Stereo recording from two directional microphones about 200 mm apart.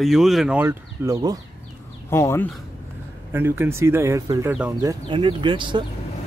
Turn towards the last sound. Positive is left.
turn(degrees=-25)  # may be behind; listen again after turning